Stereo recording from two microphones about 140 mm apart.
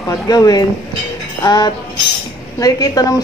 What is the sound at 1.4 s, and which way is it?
Music, 30° left (ahead or behind).